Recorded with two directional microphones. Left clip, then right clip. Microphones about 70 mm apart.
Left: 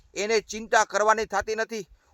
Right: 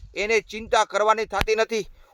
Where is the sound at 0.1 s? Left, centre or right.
Left.